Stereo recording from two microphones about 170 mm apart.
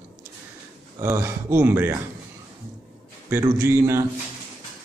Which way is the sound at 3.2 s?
15° right (ahead or behind).